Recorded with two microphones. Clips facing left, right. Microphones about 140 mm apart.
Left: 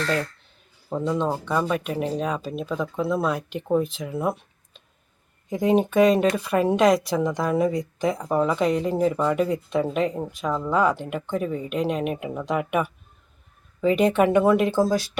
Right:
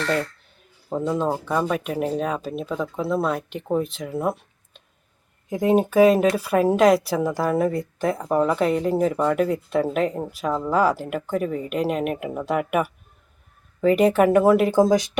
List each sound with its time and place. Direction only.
0.9 s speech: 10° right (ahead or behind)
14.8 s speech: 20° right (ahead or behind)